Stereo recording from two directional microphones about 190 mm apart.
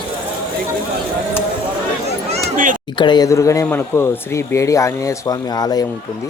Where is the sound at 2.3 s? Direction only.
45° right (ahead or behind).